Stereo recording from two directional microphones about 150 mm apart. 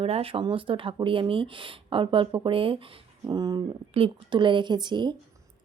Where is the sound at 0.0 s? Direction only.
40° right (ahead or behind).